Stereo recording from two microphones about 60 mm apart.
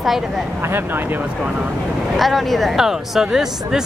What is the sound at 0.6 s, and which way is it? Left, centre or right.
Speech, right.